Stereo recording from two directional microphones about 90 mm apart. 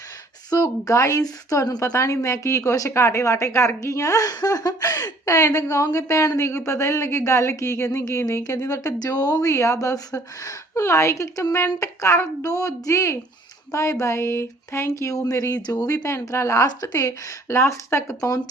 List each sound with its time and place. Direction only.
0.5 s a woman's voice: 35° left (ahead or behind)
9.5 s a woman's voice: 35° left (ahead or behind)
16.0 s a woman's voice: 30° left (ahead or behind)